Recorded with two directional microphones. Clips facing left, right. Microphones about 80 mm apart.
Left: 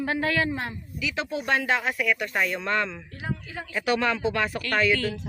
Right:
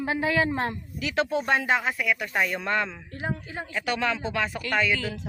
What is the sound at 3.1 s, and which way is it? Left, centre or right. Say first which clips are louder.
Speech: right 2 dB; right.